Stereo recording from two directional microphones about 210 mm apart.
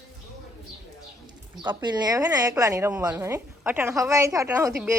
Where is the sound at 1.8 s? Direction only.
20° right (ahead or behind).